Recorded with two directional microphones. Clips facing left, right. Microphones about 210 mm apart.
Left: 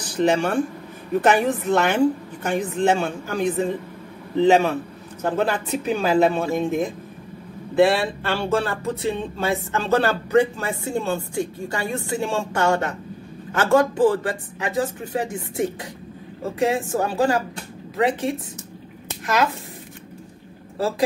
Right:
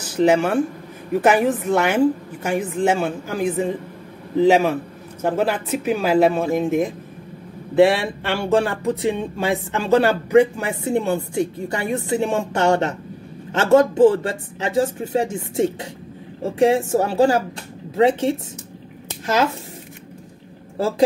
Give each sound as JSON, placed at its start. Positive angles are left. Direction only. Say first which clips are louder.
{"t": 0.0, "sound": "speech", "louder": "right 3 dB", "side_deg": -10}